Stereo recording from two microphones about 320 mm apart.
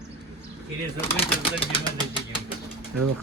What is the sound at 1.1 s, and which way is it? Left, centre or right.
Speech, centre.